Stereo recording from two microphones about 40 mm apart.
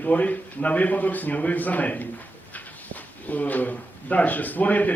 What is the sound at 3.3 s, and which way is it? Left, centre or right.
A man's voice, left.